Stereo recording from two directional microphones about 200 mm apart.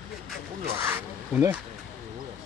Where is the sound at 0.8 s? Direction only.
10° right (ahead or behind).